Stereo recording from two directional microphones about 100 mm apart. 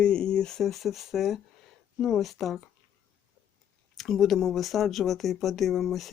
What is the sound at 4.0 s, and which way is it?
Speech, centre (ahead or behind).